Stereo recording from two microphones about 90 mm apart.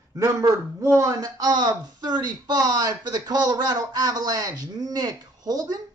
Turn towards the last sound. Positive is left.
turn(degrees=-45)  # may be behind; listen again after turning